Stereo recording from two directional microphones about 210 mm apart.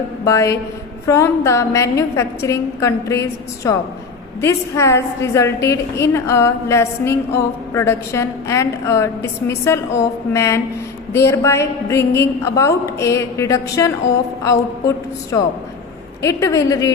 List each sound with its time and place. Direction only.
0.3 s a woman's voice: 15° left (ahead or behind)